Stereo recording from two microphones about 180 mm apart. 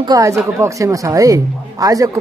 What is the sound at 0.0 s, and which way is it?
Speech, 20° right (ahead or behind).